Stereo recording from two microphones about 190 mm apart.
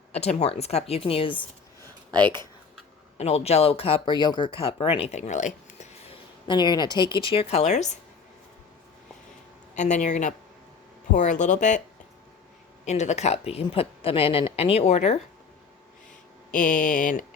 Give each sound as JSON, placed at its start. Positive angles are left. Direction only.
{"t": 0.1, "sound": "a woman's voice", "side_deg": 35}
{"t": 2.0, "sound": "speech", "side_deg": -25}
{"t": 3.2, "sound": "speech", "side_deg": 35}
{"t": 9.7, "sound": "a woman's voice", "side_deg": 40}
{"t": 12.8, "sound": "a woman's voice", "side_deg": 35}
{"t": 16.5, "sound": "speech", "side_deg": 45}